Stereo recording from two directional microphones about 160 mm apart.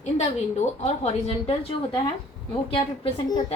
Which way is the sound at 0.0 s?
45° left (ahead or behind).